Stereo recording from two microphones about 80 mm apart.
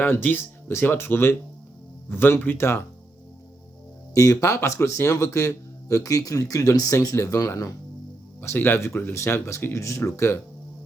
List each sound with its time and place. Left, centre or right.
0.0 s speech: left
4.1 s a man's voice: left
8.4 s speech: left